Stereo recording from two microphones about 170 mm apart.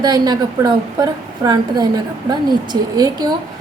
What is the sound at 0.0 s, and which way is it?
A woman's voice, 25° right (ahead or behind).